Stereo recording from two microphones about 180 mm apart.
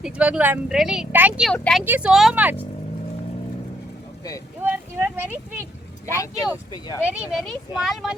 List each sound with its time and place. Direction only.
0.0 s speech: 5° right (ahead or behind)
1.8 s speech: 10° right (ahead or behind)
4.6 s speech: 10° right (ahead or behind)
6.1 s speech: 15° left (ahead or behind)
7.0 s speech: 5° right (ahead or behind)